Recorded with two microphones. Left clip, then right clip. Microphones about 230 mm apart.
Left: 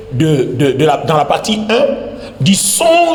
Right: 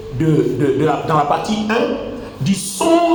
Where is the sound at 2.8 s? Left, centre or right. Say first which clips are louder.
Left 4 dB; left.